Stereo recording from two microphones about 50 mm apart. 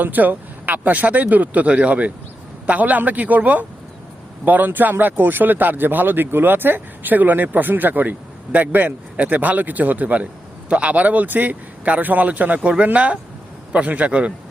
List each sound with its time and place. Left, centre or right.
0.0 s a man's voice: right